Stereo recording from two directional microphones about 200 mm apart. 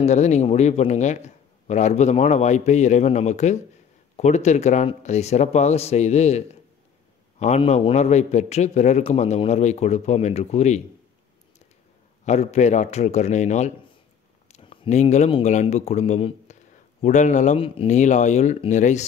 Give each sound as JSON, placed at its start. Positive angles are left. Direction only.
{"t": 0.0, "sound": "a man's voice", "side_deg": 35}
{"t": 12.3, "sound": "a man's voice", "side_deg": 35}